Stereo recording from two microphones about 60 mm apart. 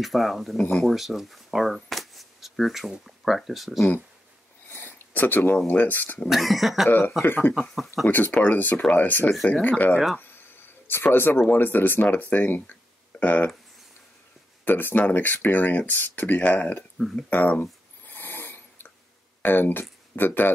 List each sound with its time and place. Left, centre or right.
0.0 s speech: centre
0.6 s speech: centre
0.8 s speech: centre
4.6 s a sound: left
5.7 s speech: left
6.2 s speech: centre
6.9 s speech: left
7.7 s speech: centre
8.1 s speech: left
10.9 s speech: left
14.6 s speech: left
17.3 s a sound: left
19.4 s speech: left